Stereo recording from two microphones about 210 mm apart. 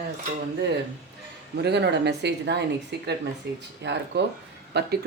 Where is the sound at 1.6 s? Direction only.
55° right (ahead or behind).